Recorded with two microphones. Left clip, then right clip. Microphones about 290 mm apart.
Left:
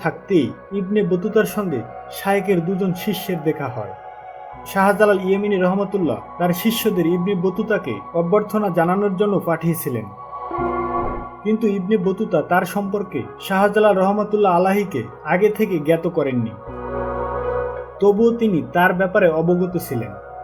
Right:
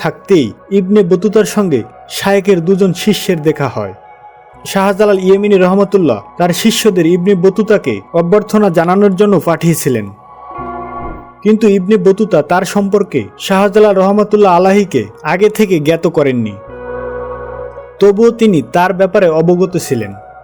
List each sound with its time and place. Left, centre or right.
0.0 s a man's voice: right
11.6 s a man's voice: right
18.0 s a man's voice: right